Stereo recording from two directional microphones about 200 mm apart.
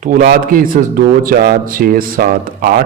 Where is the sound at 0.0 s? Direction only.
45° right (ahead or behind).